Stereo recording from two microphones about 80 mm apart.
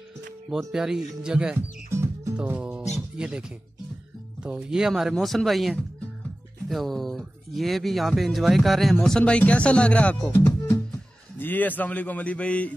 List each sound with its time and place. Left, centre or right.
0.5 s speech: centre
1.9 s music: right
2.6 s speech: centre
11.3 s a man's voice: left